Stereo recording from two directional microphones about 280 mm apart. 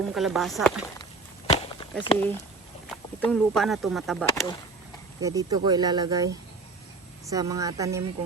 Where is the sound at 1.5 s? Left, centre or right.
Left.